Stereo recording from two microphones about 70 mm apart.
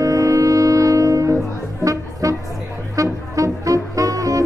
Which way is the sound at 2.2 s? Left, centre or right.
Right.